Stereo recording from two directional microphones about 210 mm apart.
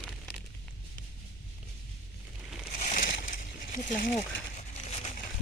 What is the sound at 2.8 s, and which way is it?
Crushing, 40° left (ahead or behind).